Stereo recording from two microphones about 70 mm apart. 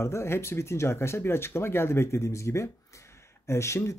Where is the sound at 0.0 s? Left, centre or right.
Left.